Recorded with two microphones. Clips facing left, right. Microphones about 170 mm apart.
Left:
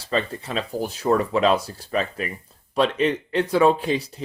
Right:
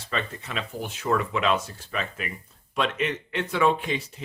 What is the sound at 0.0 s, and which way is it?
Speech, 35° left (ahead or behind).